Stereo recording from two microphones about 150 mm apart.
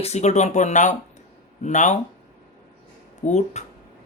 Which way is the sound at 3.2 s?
50° left (ahead or behind).